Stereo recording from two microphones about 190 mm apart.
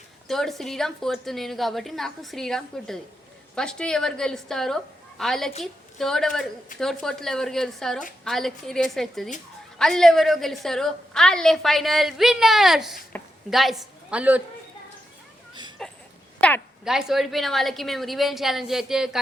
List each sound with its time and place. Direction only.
0.3 s a woman's voice: centre (ahead or behind)
15.8 s a sound: centre (ahead or behind)
16.8 s a woman's voice: centre (ahead or behind)